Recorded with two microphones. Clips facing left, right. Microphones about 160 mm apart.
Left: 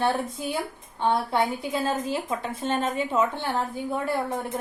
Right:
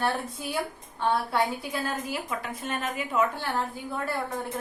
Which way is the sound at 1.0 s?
20° left (ahead or behind).